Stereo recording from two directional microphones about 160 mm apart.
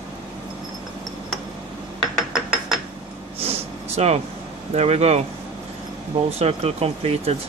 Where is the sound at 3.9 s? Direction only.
40° right (ahead or behind).